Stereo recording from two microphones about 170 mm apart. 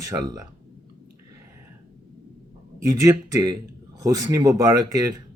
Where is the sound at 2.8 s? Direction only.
20° right (ahead or behind).